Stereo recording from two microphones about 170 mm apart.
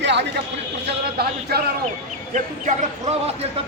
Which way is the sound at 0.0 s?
90° right.